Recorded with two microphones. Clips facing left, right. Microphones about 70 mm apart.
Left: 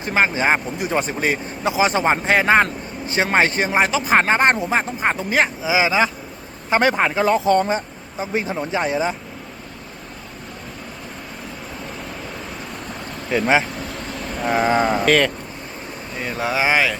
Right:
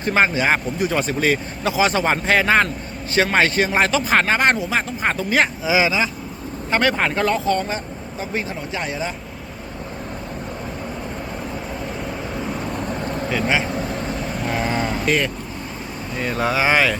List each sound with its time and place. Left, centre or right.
0.0 s speech: centre
0.3 s speech: left
4.1 s speech: left
5.6 s speech: centre
7.3 s speech: left
13.3 s speech: left
14.3 s cattle: centre
14.7 s speech: left
15.0 s speech: left
16.1 s speech: centre